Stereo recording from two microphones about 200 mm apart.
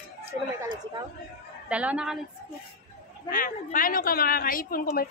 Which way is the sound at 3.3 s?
45° left (ahead or behind).